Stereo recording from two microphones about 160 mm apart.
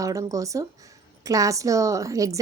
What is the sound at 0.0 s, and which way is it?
A woman's voice, 20° right (ahead or behind).